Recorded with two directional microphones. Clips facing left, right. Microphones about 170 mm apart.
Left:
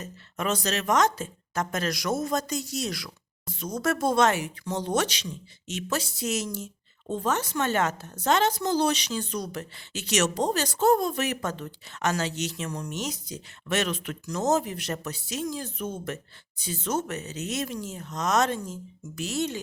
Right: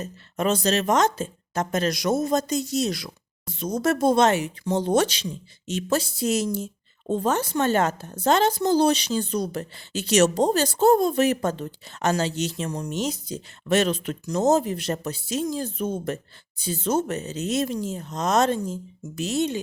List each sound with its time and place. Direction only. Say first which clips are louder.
0.0 s speech: right 6 dB; 30° right (ahead or behind)